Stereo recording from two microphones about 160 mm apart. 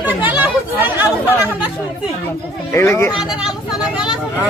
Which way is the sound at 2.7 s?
15° left (ahead or behind).